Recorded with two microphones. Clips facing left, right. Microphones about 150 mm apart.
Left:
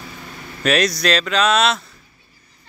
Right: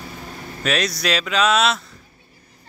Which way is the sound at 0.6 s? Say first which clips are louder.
Left 4 dB; centre (ahead or behind).